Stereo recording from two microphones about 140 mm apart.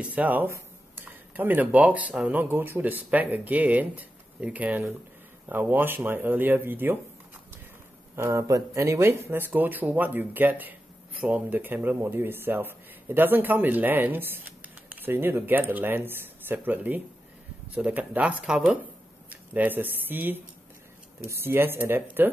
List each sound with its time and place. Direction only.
0.0 s speech: 10° right (ahead or behind)
8.2 s speech: 20° right (ahead or behind)